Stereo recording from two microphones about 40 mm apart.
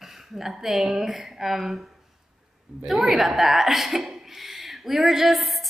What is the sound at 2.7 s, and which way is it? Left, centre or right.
Speech, right.